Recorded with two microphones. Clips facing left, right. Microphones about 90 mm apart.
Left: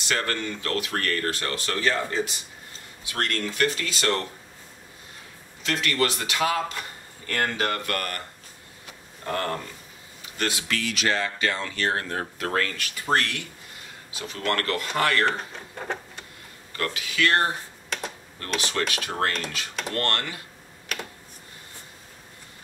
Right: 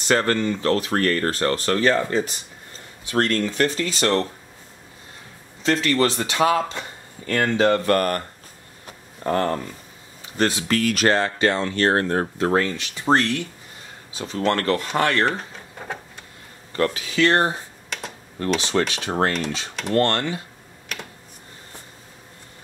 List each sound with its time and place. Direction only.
0.1 s speech: 35° right (ahead or behind)
5.6 s speech: 35° right (ahead or behind)
9.2 s speech: 35° right (ahead or behind)
12.4 s speech: 20° right (ahead or behind)
16.7 s speech: 30° right (ahead or behind)
18.6 s speech: 25° right (ahead or behind)